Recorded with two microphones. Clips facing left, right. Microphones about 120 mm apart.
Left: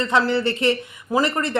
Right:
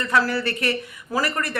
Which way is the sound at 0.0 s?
20° left (ahead or behind).